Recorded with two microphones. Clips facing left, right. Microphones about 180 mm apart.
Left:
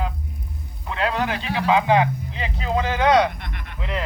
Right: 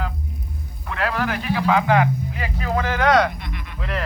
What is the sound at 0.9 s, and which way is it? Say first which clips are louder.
Speech: even; 20° left (ahead or behind).